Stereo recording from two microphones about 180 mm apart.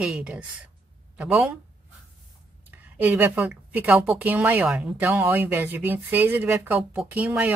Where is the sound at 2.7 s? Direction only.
10° right (ahead or behind).